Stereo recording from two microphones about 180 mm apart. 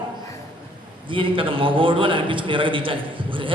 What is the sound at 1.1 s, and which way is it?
A man's voice, 30° right (ahead or behind).